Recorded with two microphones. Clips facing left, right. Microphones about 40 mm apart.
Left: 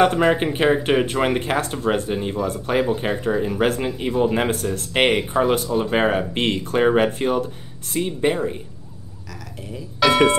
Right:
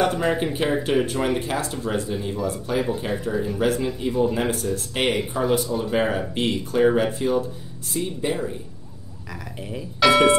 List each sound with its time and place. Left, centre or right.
0.0 s speech: left
10.0 s speech: centre